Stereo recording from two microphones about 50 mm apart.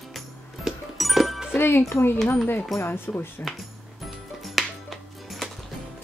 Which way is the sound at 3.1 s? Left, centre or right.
Left.